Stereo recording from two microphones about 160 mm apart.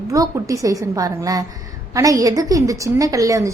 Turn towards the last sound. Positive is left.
turn(degrees=-20)  # may be behind; listen again after turning